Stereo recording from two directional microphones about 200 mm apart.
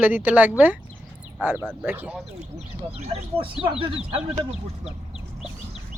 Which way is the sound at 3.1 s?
30° right (ahead or behind).